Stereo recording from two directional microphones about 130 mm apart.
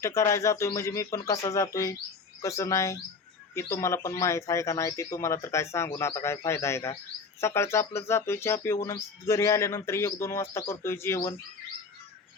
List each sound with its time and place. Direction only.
0.0 s speech: 25° left (ahead or behind)